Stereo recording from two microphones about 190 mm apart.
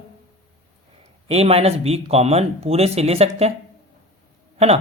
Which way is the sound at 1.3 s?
30° right (ahead or behind).